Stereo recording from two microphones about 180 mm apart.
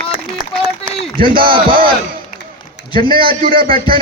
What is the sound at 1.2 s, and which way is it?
Speech, 25° right (ahead or behind).